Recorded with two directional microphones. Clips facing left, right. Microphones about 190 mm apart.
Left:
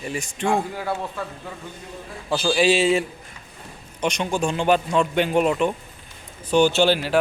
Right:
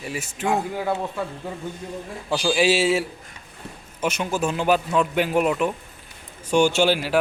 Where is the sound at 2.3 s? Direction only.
10° right (ahead or behind).